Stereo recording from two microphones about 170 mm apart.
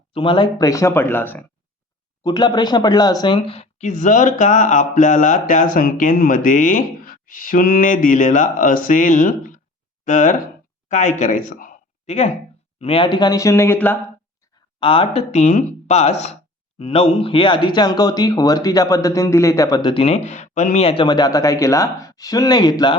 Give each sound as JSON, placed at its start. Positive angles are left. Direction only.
{"t": 0.1, "sound": "speech", "side_deg": 30}
{"t": 2.2, "sound": "speech", "side_deg": 25}
{"t": 10.8, "sound": "a sound", "side_deg": 45}
{"t": 12.8, "sound": "speech", "side_deg": 30}
{"t": 14.8, "sound": "speech", "side_deg": 30}